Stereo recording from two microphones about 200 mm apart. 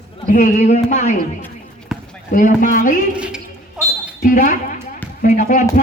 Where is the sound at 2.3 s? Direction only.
40° left (ahead or behind).